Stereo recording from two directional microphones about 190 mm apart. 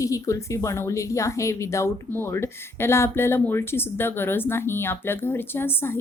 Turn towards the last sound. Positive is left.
turn(degrees=10)  # may be behind; listen again after turning